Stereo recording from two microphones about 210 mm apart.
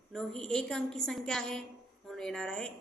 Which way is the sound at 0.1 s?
Centre (ahead or behind).